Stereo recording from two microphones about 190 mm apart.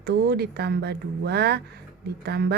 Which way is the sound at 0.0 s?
60° right (ahead or behind).